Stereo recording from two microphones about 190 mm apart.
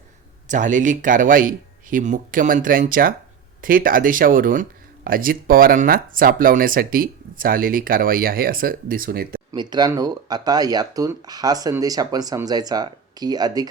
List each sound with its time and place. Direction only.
0.4 s speech: 40° right (ahead or behind)
9.5 s speech: 20° right (ahead or behind)